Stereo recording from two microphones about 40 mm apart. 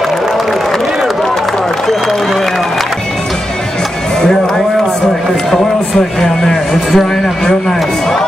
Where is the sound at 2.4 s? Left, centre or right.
Centre.